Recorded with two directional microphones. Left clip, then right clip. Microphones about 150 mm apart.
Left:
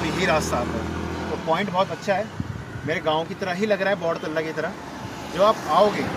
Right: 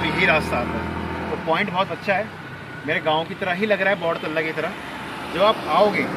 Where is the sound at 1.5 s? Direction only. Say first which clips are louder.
Right 1 dB; 25° left (ahead or behind).